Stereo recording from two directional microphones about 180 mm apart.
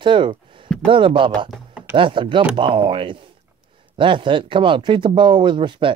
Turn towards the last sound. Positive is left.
turn(degrees=-25)  # may be behind; listen again after turning